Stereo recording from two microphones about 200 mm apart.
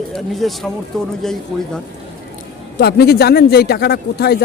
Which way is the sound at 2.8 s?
50° left (ahead or behind).